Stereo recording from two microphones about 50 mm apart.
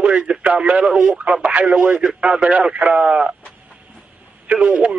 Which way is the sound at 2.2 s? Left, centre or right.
Centre.